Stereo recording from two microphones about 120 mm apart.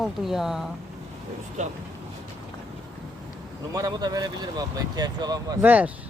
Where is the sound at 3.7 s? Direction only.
30° right (ahead or behind).